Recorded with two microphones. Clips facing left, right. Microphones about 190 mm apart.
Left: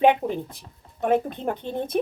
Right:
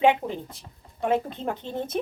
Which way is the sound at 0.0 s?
15° left (ahead or behind).